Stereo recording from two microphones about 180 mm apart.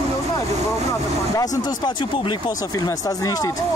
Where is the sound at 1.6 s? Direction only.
25° left (ahead or behind).